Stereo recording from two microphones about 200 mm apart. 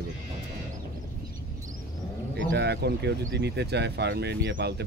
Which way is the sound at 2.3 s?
60° right (ahead or behind).